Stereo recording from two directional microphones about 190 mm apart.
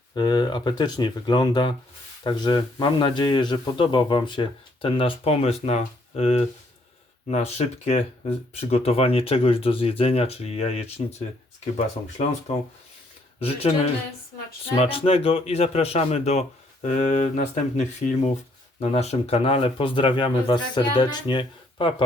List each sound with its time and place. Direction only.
0.1 s a man's voice: 20° left (ahead or behind)
13.4 s speech: 30° left (ahead or behind)
14.8 s a man's voice: 30° left (ahead or behind)